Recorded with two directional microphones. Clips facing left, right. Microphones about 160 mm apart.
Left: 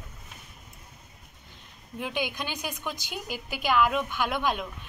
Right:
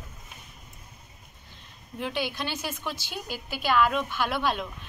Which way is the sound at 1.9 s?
10° left (ahead or behind).